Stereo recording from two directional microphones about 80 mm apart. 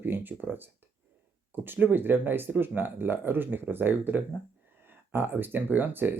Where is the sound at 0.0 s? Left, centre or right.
Right.